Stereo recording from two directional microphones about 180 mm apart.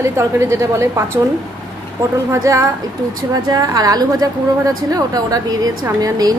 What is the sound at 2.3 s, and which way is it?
A woman's voice, 15° right (ahead or behind).